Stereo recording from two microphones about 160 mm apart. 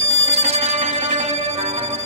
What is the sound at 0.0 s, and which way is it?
Music, 40° right (ahead or behind).